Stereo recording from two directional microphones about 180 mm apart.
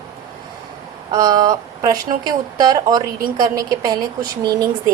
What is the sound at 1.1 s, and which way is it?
Speech, 20° right (ahead or behind).